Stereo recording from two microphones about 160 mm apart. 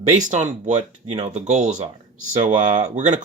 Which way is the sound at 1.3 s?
45° right (ahead or behind).